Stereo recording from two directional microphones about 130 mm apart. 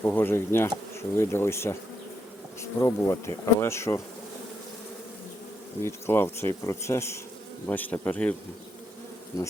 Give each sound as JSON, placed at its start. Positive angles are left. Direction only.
{"t": 0.0, "sound": "speech", "side_deg": 15}
{"t": 1.1, "sound": "bee", "side_deg": 20}
{"t": 5.8, "sound": "speech", "side_deg": 20}
{"t": 6.6, "sound": "bee", "side_deg": 25}
{"t": 7.7, "sound": "speech", "side_deg": 15}